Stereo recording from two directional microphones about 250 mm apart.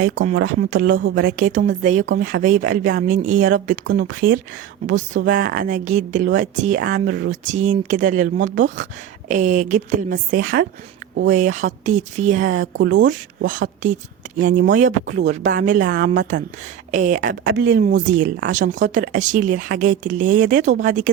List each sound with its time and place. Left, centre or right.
0.0 s speech: right
0.3 s a woman's voice: right
1.4 s speech: right
12.7 s a woman's voice: right
13.0 s speech: right
17.5 s speech: right